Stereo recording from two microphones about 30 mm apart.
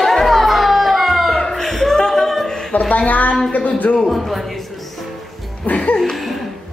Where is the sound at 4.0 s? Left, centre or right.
Centre.